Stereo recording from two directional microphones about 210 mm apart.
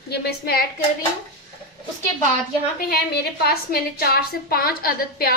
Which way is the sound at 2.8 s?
45° left (ahead or behind).